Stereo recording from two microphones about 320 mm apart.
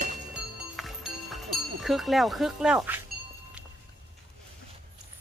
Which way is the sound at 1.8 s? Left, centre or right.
Centre.